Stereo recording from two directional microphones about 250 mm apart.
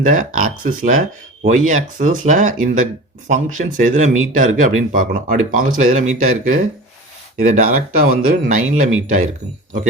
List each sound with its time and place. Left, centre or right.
0.0 s speech: right